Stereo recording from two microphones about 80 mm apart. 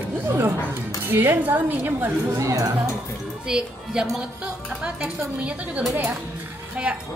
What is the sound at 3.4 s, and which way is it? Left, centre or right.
Speech, centre.